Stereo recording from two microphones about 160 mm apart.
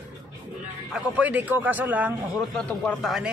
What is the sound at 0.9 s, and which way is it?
Speech, 10° right (ahead or behind).